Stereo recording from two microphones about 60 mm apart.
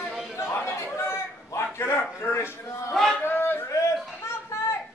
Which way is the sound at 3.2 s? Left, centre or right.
Left.